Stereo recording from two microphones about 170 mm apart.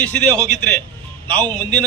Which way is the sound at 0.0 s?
10° left (ahead or behind).